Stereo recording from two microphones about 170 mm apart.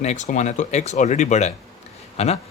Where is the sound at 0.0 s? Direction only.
45° left (ahead or behind).